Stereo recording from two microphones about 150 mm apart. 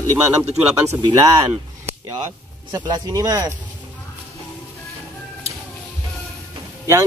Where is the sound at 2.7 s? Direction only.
25° right (ahead or behind).